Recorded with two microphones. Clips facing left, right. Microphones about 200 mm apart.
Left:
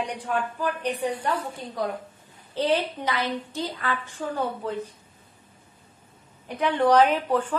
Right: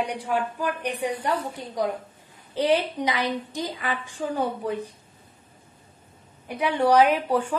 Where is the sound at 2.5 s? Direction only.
15° right (ahead or behind).